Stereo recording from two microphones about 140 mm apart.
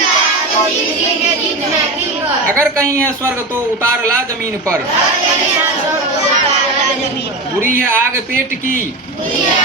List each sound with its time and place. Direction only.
2.6 s speech: 20° right (ahead or behind)